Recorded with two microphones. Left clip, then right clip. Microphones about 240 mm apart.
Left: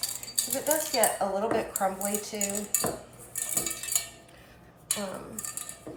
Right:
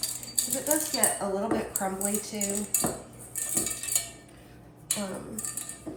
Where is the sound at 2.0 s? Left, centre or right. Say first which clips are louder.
Left 1 dB; centre.